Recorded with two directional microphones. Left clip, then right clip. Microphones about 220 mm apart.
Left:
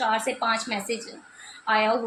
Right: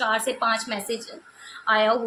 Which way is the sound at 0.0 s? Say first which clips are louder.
Right 1 dB; 15° right (ahead or behind).